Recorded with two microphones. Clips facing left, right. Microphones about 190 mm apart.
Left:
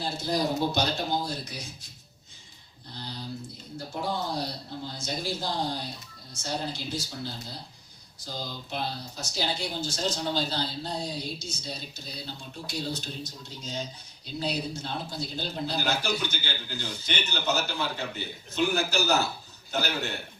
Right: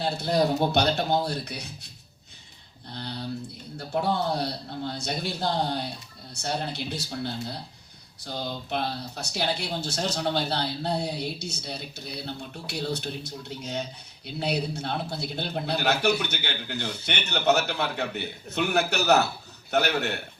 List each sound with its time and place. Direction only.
0.0 s speech: 65° right (ahead or behind)
2.9 s speech: 65° right (ahead or behind)